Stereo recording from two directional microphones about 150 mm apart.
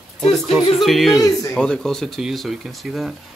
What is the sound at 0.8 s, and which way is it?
A man's voice, centre (ahead or behind).